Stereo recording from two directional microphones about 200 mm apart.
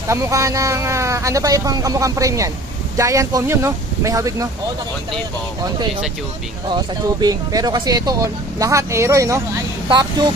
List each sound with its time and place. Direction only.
0.1 s speech: 15° right (ahead or behind)
6.7 s speech: 20° right (ahead or behind)